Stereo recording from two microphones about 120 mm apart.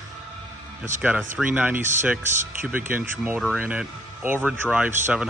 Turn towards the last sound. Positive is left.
turn(degrees=-15)  # may be behind; listen again after turning